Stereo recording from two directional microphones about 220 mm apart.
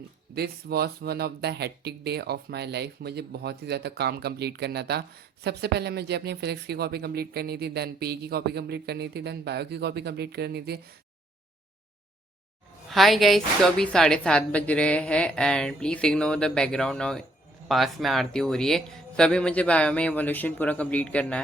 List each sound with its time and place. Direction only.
0.3 s speech: 45° right (ahead or behind)
12.9 s a woman's voice: centre (ahead or behind)